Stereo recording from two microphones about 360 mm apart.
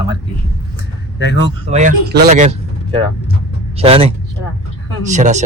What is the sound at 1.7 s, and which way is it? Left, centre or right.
A man's voice, right.